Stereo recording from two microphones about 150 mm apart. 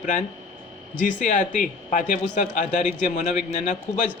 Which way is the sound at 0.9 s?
55° left (ahead or behind).